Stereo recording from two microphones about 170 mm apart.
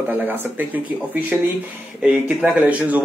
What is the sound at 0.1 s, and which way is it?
Speech, 10° right (ahead or behind).